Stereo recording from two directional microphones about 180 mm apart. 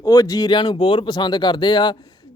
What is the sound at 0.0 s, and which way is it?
Speech, 20° left (ahead or behind).